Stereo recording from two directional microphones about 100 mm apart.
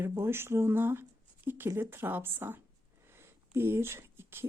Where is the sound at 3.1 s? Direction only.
25° right (ahead or behind).